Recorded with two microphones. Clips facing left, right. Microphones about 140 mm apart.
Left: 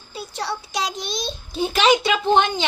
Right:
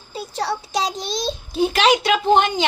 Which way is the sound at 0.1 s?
40° right (ahead or behind).